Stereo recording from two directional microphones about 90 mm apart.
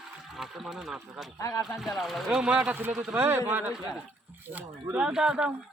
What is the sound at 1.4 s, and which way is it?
Speech, 35° left (ahead or behind).